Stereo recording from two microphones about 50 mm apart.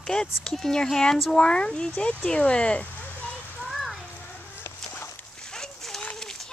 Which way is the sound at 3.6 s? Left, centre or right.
Centre.